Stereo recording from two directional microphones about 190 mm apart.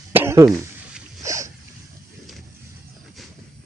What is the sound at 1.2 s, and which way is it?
Boat, 15° right (ahead or behind).